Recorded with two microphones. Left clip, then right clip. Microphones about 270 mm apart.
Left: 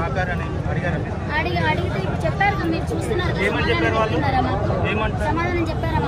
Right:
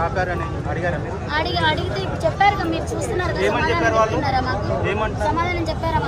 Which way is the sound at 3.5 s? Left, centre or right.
Right.